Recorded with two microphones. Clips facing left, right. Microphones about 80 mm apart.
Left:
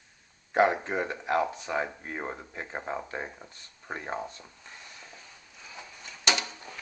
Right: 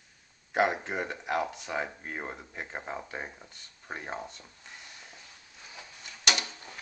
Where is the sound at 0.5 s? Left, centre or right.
Centre.